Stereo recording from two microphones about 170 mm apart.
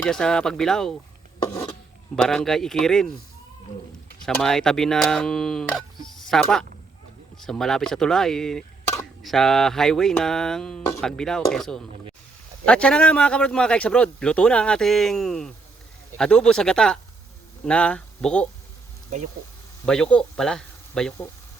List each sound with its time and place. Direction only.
0.0 s a man's voice: 5° left (ahead or behind)
1.5 s a sound: 10° left (ahead or behind)
2.2 s a man's voice: 5° left (ahead or behind)
4.2 s a man's voice: 5° left (ahead or behind)
19.8 s speech: 5° left (ahead or behind)